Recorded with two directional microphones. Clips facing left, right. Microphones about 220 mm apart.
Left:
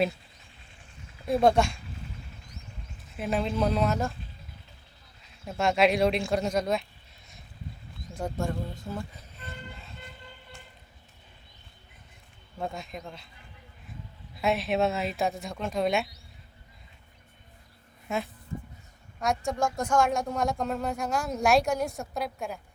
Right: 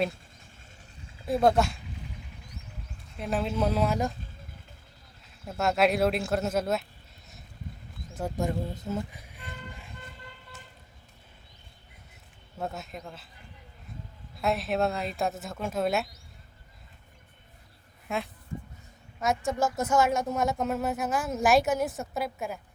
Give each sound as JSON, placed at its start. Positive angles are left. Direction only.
{"t": 1.3, "sound": "speech", "side_deg": 0}
{"t": 3.2, "sound": "speech", "side_deg": 0}
{"t": 5.5, "sound": "speech", "side_deg": 0}
{"t": 8.4, "sound": "vehicle", "side_deg": -20}
{"t": 12.5, "sound": "speech", "side_deg": -5}
{"t": 14.3, "sound": "speech", "side_deg": 0}
{"t": 19.2, "sound": "speech", "side_deg": 0}